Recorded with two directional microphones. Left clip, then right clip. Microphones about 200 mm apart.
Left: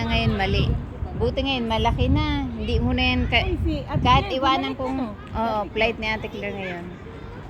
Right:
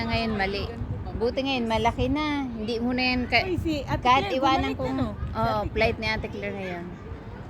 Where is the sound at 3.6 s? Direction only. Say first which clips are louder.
Even; 10° right (ahead or behind).